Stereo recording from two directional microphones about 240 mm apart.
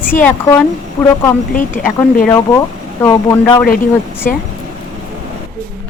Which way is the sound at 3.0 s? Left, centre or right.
Centre.